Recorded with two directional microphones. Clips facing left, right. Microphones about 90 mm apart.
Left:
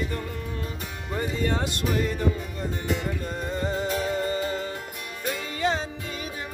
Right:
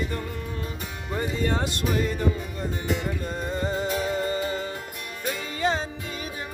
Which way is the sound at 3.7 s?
15° right (ahead or behind).